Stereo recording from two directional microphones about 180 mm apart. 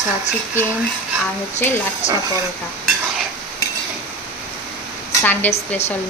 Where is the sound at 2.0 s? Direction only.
40° left (ahead or behind).